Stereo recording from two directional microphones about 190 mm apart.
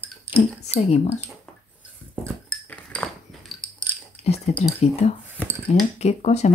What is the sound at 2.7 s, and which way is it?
Cutlery, 5° left (ahead or behind).